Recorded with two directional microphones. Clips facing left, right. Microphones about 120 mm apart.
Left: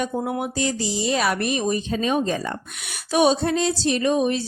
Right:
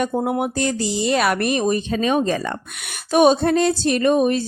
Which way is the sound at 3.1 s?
50° right (ahead or behind).